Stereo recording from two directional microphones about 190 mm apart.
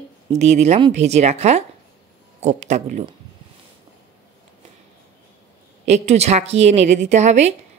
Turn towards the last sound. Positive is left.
turn(degrees=-35)  # may be behind; listen again after turning